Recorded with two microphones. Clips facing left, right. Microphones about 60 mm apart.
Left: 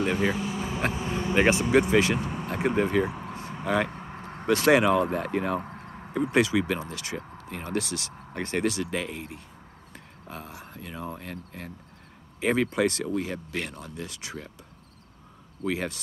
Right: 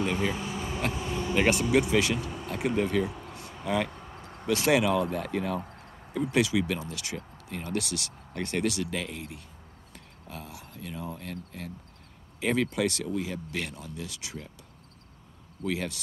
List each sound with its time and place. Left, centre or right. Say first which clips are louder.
0.0 s speech: left 3 dB; centre
0.3 s air conditioning: left 3 dB; centre
0.7 s vehicle: left 2 dB; centre
1.0 s speech: left 3 dB; left
11.1 s speech: even; left
13.7 s speech: left 2 dB; left
13.9 s speech: left 2 dB; left
15.6 s speech: left 2 dB; left